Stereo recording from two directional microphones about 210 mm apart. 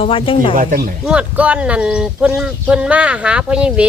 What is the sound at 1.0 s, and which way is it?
Speech, 5° right (ahead or behind).